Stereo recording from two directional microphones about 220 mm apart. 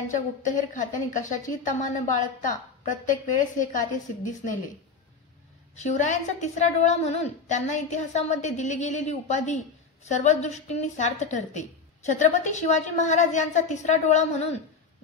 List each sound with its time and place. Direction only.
0.1 s a woman's voice: 35° left (ahead or behind)
5.8 s a woman's voice: 35° left (ahead or behind)